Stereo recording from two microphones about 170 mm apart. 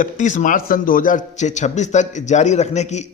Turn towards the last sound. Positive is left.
turn(degrees=40)  # may be behind; listen again after turning